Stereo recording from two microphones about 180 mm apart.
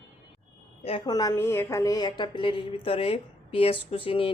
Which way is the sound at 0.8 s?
30° left (ahead or behind).